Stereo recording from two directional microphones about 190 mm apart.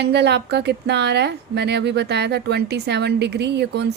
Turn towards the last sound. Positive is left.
turn(degrees=-65)  # may be behind; listen again after turning